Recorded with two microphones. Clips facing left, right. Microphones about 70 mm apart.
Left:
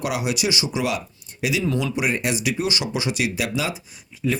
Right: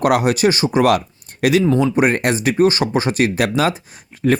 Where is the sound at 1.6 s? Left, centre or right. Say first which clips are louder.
Right 9 dB; right.